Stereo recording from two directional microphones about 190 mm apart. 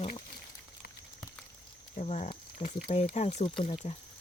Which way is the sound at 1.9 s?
35° left (ahead or behind).